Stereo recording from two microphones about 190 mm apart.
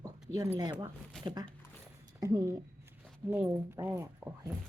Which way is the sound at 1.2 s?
25° right (ahead or behind).